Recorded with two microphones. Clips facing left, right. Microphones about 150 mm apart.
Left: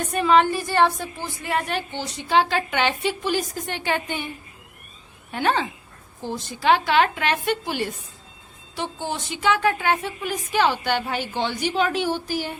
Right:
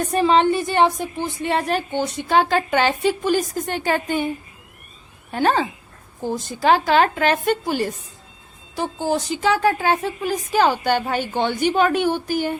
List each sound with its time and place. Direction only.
0.1 s a woman's voice: 30° right (ahead or behind)
1.9 s a woman's voice: 55° right (ahead or behind)
5.3 s a woman's voice: 40° right (ahead or behind)